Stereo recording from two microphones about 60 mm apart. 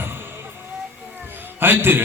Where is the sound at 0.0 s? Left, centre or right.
Right.